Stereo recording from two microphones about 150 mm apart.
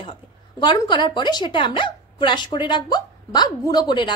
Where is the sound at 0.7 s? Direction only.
30° left (ahead or behind).